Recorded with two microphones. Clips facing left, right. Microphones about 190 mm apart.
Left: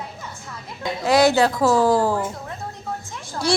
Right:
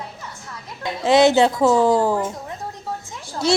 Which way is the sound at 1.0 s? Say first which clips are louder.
Right 2 dB; 20° right (ahead or behind).